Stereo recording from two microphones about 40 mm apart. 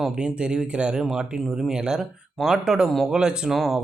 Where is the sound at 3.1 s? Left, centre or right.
Centre.